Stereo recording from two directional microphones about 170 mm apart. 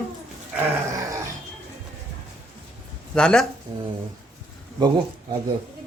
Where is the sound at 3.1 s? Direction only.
5° left (ahead or behind).